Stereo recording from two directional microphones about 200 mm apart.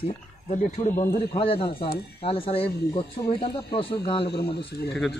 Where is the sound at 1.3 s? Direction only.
25° left (ahead or behind).